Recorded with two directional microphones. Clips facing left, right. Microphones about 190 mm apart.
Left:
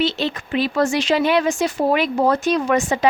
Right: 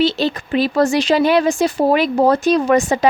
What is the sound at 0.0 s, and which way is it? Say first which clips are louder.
Speech: right 4 dB; 35° right (ahead or behind).